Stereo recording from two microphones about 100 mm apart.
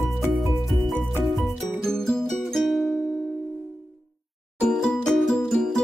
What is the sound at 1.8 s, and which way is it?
Music, 5° left (ahead or behind).